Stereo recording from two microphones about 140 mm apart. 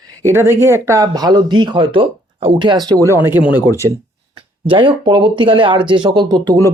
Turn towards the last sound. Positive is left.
turn(degrees=-25)  # may be behind; listen again after turning